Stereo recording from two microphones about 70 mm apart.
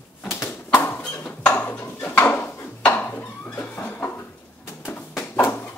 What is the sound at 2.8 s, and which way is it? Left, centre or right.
Dishes, left.